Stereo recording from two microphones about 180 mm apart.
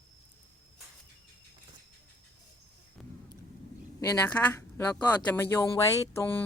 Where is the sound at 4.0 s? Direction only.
15° left (ahead or behind).